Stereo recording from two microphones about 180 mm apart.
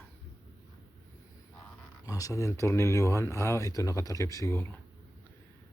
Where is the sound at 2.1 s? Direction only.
20° left (ahead or behind).